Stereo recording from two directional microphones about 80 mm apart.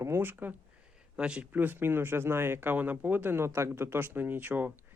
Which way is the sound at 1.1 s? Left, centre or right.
Centre.